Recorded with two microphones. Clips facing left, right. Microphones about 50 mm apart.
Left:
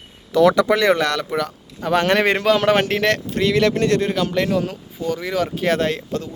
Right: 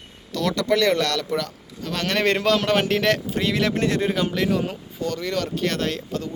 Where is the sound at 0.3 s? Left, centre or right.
Centre.